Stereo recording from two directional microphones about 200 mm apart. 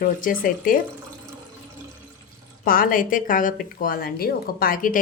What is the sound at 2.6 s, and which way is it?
A woman's voice, 45° left (ahead or behind).